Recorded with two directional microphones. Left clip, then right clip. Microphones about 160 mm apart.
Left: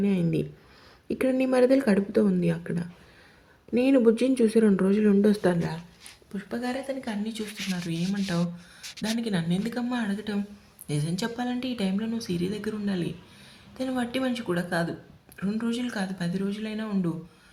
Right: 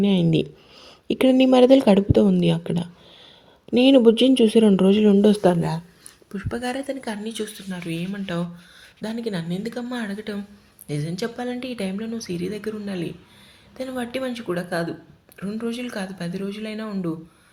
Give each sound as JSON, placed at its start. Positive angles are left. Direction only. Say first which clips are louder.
{"t": 0.2, "sound": "speech", "louder": "right 7 dB", "side_deg": 0}
{"t": 1.0, "sound": "speech", "louder": "right 8 dB", "side_deg": -30}
{"t": 3.9, "sound": "speech", "louder": "right 6 dB", "side_deg": -30}